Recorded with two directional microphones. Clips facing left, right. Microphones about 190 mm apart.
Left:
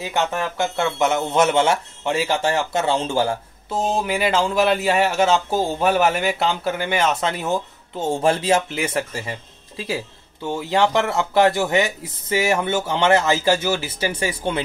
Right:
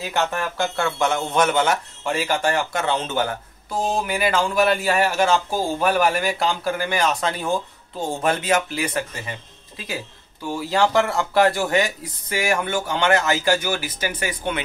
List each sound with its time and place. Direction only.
0.0 s speech: 20° left (ahead or behind)